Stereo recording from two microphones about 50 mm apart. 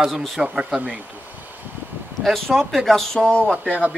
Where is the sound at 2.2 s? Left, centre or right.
Centre.